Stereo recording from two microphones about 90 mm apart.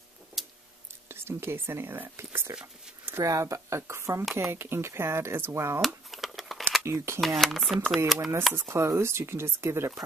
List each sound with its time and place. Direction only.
0.4 s a sound: centre (ahead or behind)
1.0 s speech: 25° right (ahead or behind)
5.8 s a sound: centre (ahead or behind)
6.8 s speech: 30° right (ahead or behind)
7.2 s speech: centre (ahead or behind)
8.5 s speech: 30° right (ahead or behind)